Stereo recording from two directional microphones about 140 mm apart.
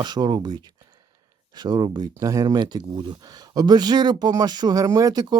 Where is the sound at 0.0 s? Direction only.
30° right (ahead or behind).